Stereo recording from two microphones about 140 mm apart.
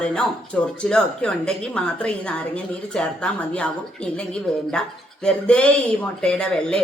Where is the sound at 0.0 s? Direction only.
10° left (ahead or behind).